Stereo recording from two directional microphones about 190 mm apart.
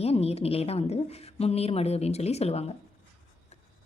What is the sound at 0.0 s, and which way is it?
A woman's voice, 30° left (ahead or behind).